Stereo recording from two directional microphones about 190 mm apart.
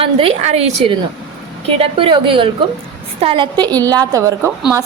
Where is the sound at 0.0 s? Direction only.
30° right (ahead or behind).